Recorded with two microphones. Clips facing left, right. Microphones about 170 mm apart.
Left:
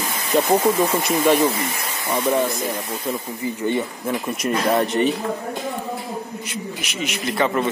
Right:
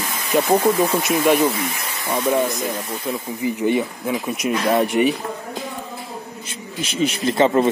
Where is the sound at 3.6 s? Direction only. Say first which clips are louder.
Right 2 dB; 15° right (ahead or behind).